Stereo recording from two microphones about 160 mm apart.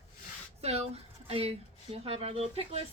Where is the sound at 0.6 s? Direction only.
40° right (ahead or behind).